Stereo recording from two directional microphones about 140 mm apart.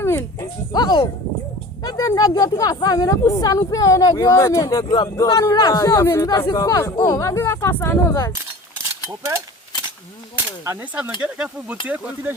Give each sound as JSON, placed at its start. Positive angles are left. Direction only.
{"t": 0.0, "sound": "a sound", "side_deg": 15}
{"t": 0.7, "sound": "speech", "side_deg": 30}
{"t": 9.0, "sound": "speech", "side_deg": -20}
{"t": 11.2, "sound": "speech", "side_deg": -10}